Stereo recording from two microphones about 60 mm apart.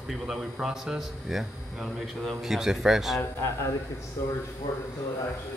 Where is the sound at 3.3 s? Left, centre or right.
Left.